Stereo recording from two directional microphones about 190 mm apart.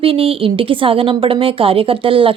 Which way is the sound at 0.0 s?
30° right (ahead or behind).